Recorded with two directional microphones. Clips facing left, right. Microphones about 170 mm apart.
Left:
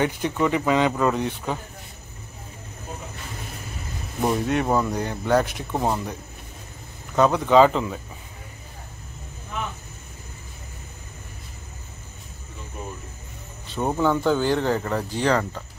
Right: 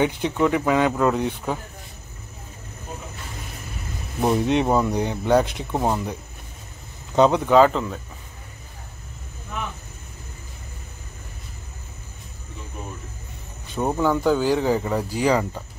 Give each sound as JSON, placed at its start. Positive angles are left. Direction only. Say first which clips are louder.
{"t": 0.0, "sound": "speech", "louder": "right 2 dB", "side_deg": -15}
{"t": 4.2, "sound": "speech", "louder": "right 3 dB", "side_deg": -20}
{"t": 7.2, "sound": "speech", "louder": "right 3 dB", "side_deg": -20}
{"t": 7.4, "sound": "speech", "louder": "even", "side_deg": 0}
{"t": 13.7, "sound": "speech", "louder": "right 1 dB", "side_deg": -5}